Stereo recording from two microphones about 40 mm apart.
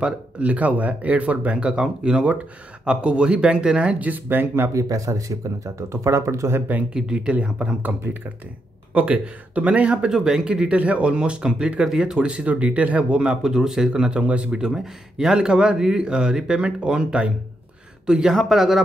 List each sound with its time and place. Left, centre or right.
0.0 s speech: right
1.6 s speech: right
4.3 s speech: right
6.1 s speech: right
6.9 s speech: right
7.3 s speech: right
8.9 s speech: right
10.0 s speech: centre
10.8 s speech: right; by 12.2 s centre
12.2 s speech: right
13.2 s speech: centre
14.8 s speech: centre
18.3 s speech: centre